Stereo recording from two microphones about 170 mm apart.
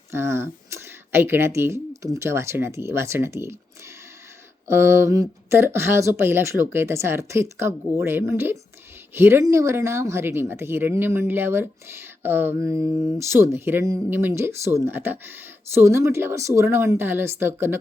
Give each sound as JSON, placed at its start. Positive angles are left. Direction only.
{"t": 0.1, "sound": "speech", "side_deg": -15}
{"t": 4.7, "sound": "speech", "side_deg": -15}